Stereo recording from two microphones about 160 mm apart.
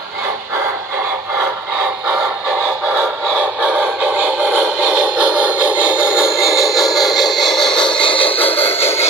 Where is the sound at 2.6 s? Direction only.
5° right (ahead or behind).